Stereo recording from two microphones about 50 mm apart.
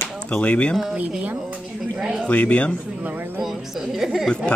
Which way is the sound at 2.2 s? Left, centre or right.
Left.